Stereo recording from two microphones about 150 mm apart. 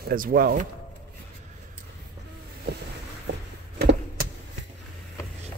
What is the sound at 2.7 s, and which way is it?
Boat, 90° right.